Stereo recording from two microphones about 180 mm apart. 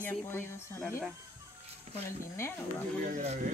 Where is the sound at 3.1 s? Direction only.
40° right (ahead or behind).